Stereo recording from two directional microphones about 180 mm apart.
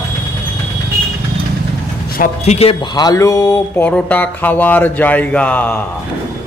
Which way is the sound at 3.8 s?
5° left (ahead or behind).